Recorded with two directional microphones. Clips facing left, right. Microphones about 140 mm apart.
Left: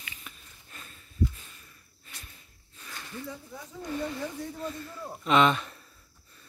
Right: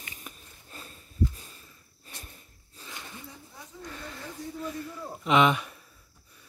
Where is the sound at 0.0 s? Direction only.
40° right (ahead or behind).